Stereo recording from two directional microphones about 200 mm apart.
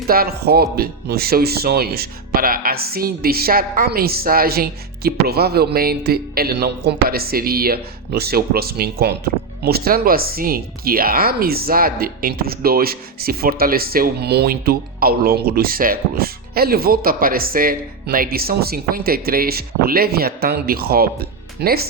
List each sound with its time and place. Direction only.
0.1 s speech: 50° right (ahead or behind)